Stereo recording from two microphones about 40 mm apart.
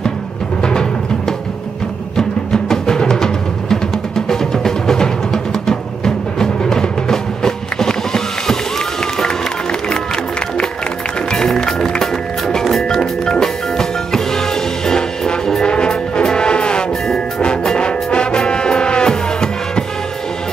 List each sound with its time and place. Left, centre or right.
0.6 s music: centre
2.1 s music: centre
11.2 s music: centre